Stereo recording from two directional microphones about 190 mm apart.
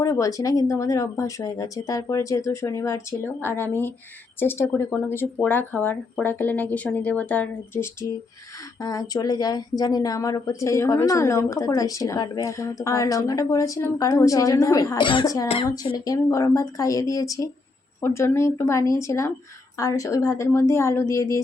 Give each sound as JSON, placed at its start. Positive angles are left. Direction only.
{"t": 0.0, "sound": "speech", "side_deg": 15}